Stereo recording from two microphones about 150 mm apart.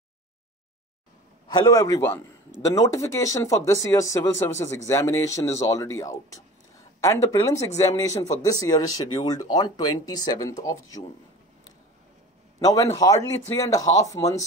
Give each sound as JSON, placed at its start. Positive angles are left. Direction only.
{"t": 1.5, "sound": "speech", "side_deg": 25}
{"t": 12.5, "sound": "a man's voice", "side_deg": 25}